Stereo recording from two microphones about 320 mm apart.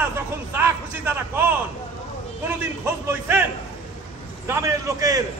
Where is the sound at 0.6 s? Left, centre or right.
Centre.